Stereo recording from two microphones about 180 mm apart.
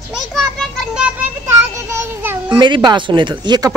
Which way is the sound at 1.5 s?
15° right (ahead or behind).